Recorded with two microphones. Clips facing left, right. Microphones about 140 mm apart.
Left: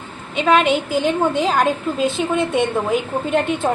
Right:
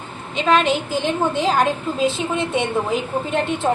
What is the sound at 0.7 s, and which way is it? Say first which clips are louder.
Speech: left 3 dB; 50° left (ahead or behind).